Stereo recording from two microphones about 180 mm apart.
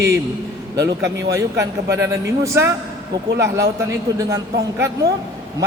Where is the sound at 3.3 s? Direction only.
75° right (ahead or behind).